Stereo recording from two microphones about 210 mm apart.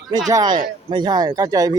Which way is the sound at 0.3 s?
20° right (ahead or behind).